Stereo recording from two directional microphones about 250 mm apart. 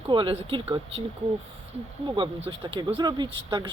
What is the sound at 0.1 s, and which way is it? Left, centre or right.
Speech, centre.